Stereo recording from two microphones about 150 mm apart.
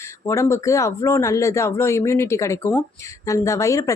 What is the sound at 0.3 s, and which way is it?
Speech, 20° left (ahead or behind).